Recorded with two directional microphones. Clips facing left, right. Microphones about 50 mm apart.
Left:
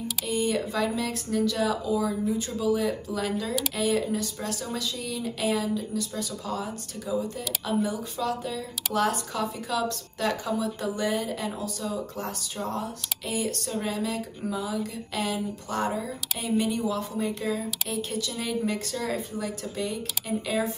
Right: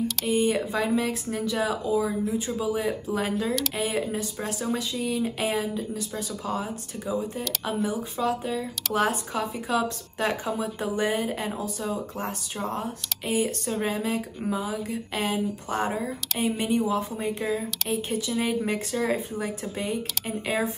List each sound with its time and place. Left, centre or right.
0.3 s a woman's voice: right